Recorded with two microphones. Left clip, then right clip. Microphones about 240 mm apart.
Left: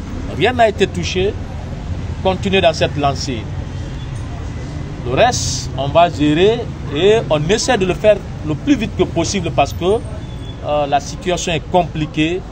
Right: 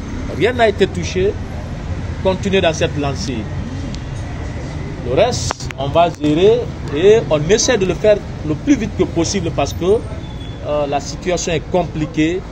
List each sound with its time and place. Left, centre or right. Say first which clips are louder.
0.4 s speech: left 1 dB; left
2.2 s speech: left 1 dB; left
5.1 s speech: left 1 dB; left